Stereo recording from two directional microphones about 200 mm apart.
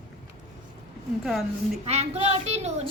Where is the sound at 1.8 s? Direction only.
35° right (ahead or behind).